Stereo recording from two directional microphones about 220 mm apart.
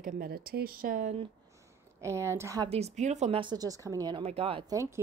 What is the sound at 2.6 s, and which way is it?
Speech, 30° right (ahead or behind).